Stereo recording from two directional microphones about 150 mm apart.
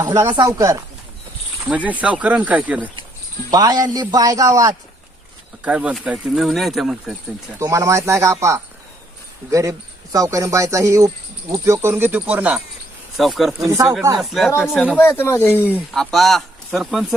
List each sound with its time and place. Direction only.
0.0 s speech: 25° right (ahead or behind)
1.7 s speech: 10° right (ahead or behind)
3.5 s speech: 25° right (ahead or behind)
5.6 s speech: 10° right (ahead or behind)
7.6 s speech: 20° right (ahead or behind); by 13.7 s centre (ahead or behind)
13.7 s speech: 20° right (ahead or behind)
14.2 s speech: centre (ahead or behind)
14.9 s speech: 15° left (ahead or behind)
15.7 s speech: centre (ahead or behind)